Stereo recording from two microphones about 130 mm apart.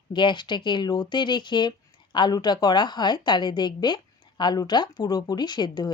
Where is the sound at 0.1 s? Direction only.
35° left (ahead or behind).